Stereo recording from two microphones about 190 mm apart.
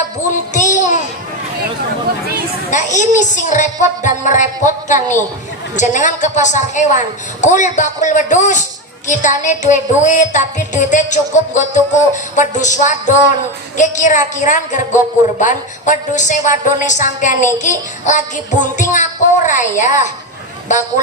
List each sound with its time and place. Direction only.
0.3 s child singing: 40° left (ahead or behind)
2.6 s a woman's voice: 40° left (ahead or behind)